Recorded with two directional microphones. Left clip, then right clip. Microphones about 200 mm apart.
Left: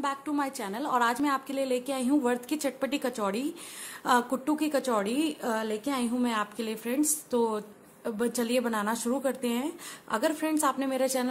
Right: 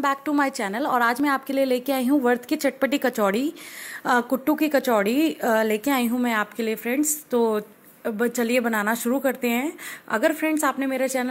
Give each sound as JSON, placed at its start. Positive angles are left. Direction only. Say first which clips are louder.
{"t": 0.0, "sound": "a woman's voice", "louder": "right 8 dB", "side_deg": -25}